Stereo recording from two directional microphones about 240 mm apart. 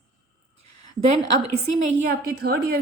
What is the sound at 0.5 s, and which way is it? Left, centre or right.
A woman's voice, right.